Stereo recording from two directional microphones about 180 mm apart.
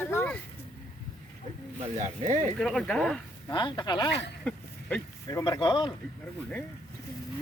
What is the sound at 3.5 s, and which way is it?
Speech, 25° left (ahead or behind).